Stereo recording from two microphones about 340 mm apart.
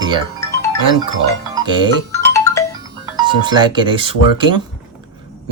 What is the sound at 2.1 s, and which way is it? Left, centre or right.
Music, centre.